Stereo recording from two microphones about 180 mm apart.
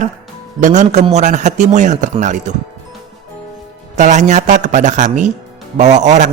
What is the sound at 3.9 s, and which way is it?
A man's voice, 40° right (ahead or behind).